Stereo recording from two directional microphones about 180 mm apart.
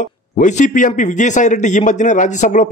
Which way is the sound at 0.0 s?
45° left (ahead or behind).